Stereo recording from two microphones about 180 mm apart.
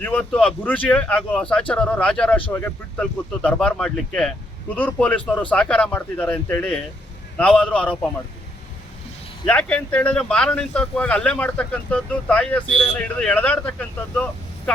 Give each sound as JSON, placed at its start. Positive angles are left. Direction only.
{"t": 0.0, "sound": "speech", "side_deg": 5}
{"t": 9.5, "sound": "speech", "side_deg": 5}